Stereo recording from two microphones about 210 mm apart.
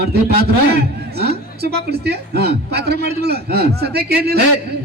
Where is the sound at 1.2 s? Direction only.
50° right (ahead or behind).